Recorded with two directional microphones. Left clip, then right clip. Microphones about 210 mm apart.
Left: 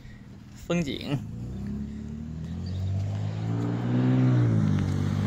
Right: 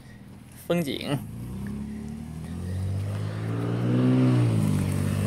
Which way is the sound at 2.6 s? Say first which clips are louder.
Right 1 dB; 60° right (ahead or behind).